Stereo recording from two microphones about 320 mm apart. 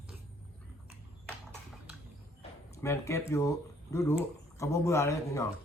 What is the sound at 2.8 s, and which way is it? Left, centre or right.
A man's voice, centre.